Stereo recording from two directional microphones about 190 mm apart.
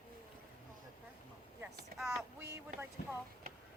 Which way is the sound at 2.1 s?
15° right (ahead or behind).